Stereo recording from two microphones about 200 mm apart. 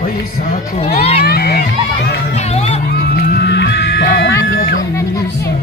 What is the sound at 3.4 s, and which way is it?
Music, 55° left (ahead or behind).